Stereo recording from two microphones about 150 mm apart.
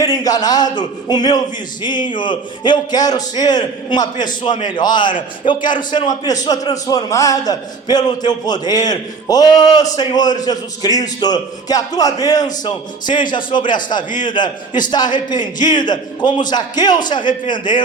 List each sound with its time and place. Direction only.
0.0 s a man's voice: 25° left (ahead or behind)